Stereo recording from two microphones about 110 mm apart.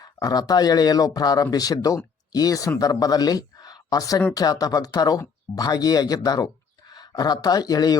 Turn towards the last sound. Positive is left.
turn(degrees=35)  # may be behind; listen again after turning